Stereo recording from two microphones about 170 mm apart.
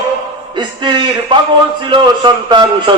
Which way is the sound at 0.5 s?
25° right (ahead or behind).